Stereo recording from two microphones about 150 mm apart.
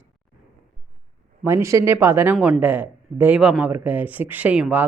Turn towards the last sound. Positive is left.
turn(degrees=-10)  # may be behind; listen again after turning